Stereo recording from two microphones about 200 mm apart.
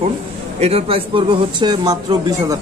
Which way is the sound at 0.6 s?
30° right (ahead or behind).